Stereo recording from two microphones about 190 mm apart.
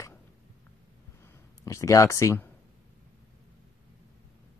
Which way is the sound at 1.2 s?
15° left (ahead or behind).